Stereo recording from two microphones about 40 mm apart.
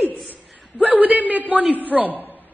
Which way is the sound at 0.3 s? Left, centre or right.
Right.